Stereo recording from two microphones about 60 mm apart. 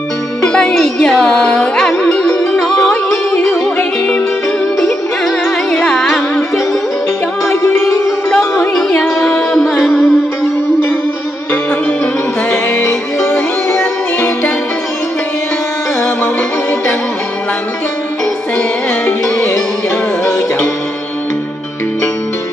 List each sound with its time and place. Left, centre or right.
0.5 s music: centre
4.7 s music: centre
7.4 s music: left
8.4 s music: centre
9.8 s music: centre
12.4 s music: left